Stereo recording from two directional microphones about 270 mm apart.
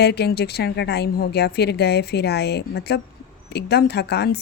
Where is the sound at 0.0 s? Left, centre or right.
Left.